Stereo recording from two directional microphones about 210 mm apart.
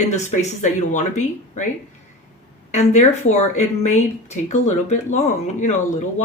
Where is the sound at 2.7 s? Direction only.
35° left (ahead or behind).